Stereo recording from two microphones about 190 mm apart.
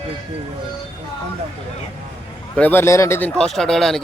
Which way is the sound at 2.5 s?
10° left (ahead or behind).